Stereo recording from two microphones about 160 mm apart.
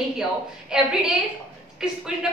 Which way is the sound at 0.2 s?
5° right (ahead or behind).